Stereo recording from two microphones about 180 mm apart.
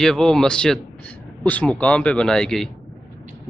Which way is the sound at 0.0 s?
Centre (ahead or behind).